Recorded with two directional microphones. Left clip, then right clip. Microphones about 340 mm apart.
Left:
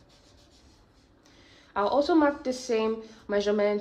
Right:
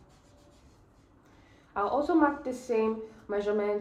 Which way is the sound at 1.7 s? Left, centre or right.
Left.